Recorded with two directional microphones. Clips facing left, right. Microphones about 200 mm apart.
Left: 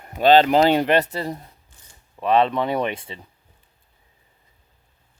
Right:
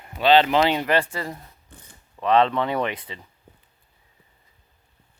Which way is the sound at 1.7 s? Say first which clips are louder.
Right 9 dB; 60° right (ahead or behind).